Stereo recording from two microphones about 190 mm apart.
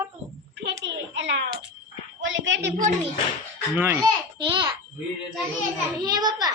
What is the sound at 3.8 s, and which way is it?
Speech, 10° right (ahead or behind).